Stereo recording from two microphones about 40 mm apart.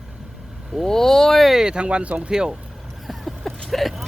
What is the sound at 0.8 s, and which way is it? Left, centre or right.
Speech, centre.